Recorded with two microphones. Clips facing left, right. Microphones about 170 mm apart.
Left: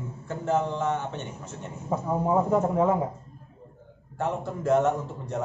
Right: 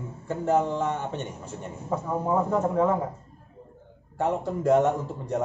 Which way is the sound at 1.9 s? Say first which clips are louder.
Left 1 dB; 15° left (ahead or behind).